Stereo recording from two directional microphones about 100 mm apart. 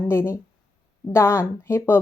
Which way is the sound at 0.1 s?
25° left (ahead or behind).